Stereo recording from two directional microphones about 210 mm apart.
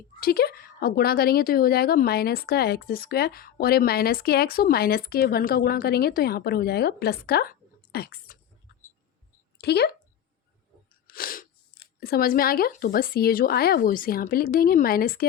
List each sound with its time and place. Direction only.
0.2 s a woman's voice: 45° left (ahead or behind)
9.6 s speech: 50° left (ahead or behind)
11.0 s speech: 45° left (ahead or behind)